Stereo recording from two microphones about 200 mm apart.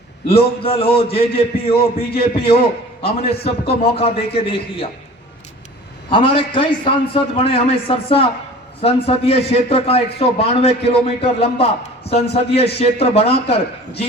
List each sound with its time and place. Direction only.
0.3 s a man's voice: 30° left (ahead or behind)
6.1 s a man's voice: 25° left (ahead or behind)